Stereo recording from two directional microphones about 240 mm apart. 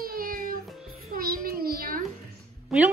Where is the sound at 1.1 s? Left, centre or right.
Right.